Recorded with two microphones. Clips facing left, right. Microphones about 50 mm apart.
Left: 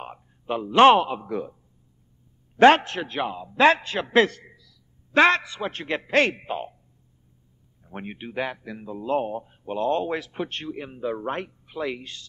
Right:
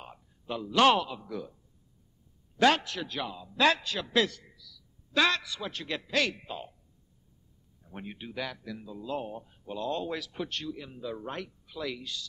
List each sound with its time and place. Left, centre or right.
0.0 s a man's voice: left
7.8 s speech: left